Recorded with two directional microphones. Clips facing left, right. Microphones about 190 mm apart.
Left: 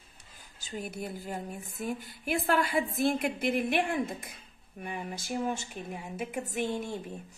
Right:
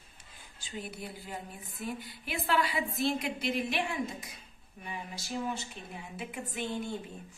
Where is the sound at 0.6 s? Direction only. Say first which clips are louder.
Left 4 dB; 45° left (ahead or behind).